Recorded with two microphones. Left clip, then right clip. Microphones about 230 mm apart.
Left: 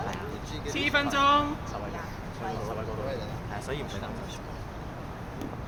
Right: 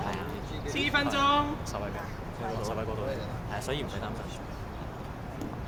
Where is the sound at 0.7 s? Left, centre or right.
Centre.